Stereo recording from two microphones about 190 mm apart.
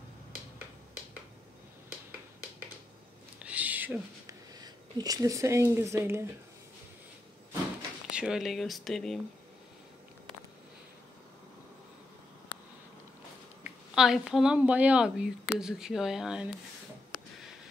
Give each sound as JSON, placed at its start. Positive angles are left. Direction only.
{"t": 3.3, "sound": "a sound", "side_deg": -5}
{"t": 4.6, "sound": "speech", "side_deg": -20}
{"t": 8.2, "sound": "speech", "side_deg": -5}
{"t": 13.7, "sound": "speech", "side_deg": -5}